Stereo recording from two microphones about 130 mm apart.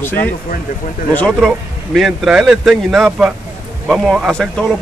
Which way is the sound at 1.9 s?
5° right (ahead or behind).